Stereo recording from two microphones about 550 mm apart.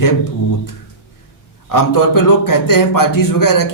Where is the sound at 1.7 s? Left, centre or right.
Left.